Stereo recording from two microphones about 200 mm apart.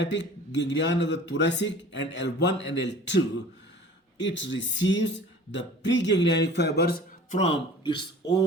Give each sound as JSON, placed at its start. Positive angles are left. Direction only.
{"t": 0.0, "sound": "speech", "side_deg": 65}
{"t": 4.2, "sound": "speech", "side_deg": 65}
{"t": 7.3, "sound": "speech", "side_deg": 35}